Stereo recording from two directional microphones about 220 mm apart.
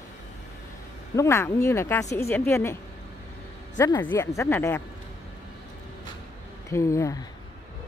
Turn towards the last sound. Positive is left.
turn(degrees=15)  # may be behind; listen again after turning